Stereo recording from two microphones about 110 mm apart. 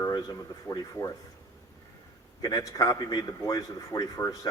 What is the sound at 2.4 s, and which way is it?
A man's voice, 35° left (ahead or behind).